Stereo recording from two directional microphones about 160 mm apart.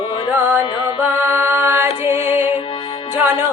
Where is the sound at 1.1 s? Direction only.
15° right (ahead or behind).